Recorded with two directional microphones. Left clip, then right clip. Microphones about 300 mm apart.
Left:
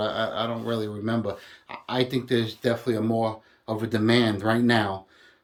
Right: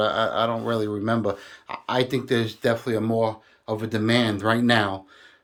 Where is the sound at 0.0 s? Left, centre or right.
Centre.